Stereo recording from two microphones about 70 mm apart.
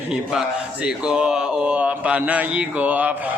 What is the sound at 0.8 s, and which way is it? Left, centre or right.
Speech, centre.